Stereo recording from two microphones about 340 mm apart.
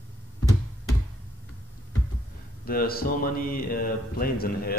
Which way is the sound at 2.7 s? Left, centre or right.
Left.